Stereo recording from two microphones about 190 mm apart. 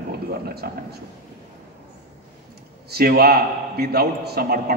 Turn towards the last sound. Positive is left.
turn(degrees=-50)  # may be behind; listen again after turning